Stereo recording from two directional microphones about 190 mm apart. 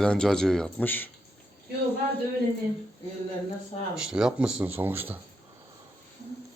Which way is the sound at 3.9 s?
5° right (ahead or behind).